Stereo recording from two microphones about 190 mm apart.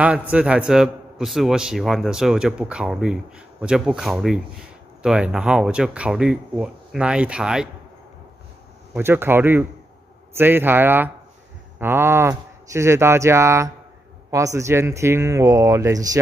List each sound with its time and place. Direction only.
0.0 s a man's voice: 5° right (ahead or behind)
8.9 s speech: 10° right (ahead or behind)